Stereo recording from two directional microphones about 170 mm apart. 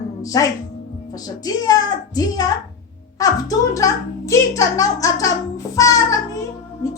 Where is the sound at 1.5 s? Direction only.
20° left (ahead or behind).